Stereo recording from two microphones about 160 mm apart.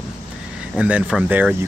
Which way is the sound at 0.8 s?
5° right (ahead or behind).